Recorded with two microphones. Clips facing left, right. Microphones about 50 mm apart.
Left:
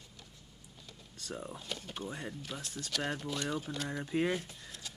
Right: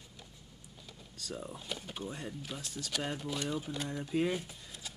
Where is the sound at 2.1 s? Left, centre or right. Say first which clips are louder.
Left 1 dB; centre.